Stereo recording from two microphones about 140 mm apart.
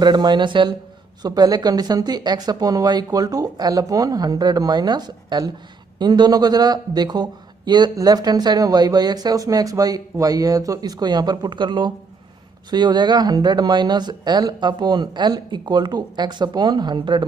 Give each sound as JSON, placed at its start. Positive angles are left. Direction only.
{"t": 0.0, "sound": "a man's voice", "side_deg": -30}